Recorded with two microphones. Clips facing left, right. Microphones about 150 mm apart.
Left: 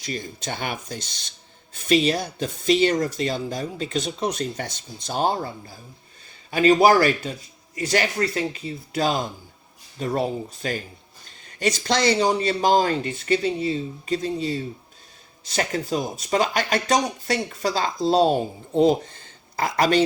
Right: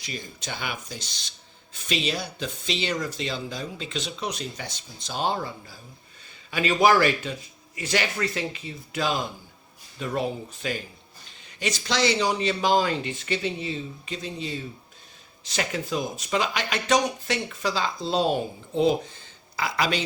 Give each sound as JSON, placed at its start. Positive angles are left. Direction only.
{"t": 0.0, "sound": "speech", "side_deg": 45}
{"t": 19.5, "sound": "speech", "side_deg": 50}